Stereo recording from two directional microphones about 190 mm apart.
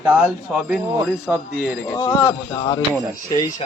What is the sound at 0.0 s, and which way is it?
Speech, 5° right (ahead or behind).